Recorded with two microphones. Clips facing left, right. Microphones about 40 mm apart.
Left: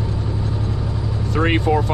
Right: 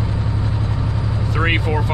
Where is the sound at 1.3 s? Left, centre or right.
Centre.